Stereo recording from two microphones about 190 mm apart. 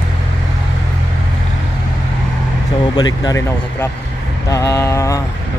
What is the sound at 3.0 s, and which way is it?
Speech, 20° left (ahead or behind).